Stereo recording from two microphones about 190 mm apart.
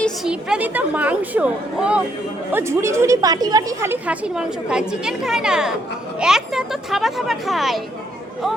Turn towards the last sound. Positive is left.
turn(degrees=0)  # may be behind; listen again after turning